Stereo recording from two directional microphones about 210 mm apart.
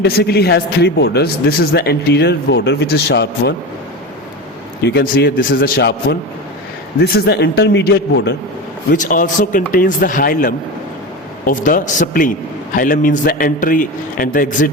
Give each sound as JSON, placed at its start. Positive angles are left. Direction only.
{"t": 0.0, "sound": "speech", "side_deg": 50}
{"t": 4.9, "sound": "speech", "side_deg": 50}
{"t": 8.9, "sound": "a man's voice", "side_deg": 40}